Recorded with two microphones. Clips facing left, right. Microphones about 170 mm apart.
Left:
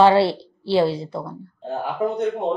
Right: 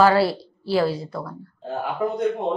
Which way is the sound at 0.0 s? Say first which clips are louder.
Left 2 dB; 25° left (ahead or behind).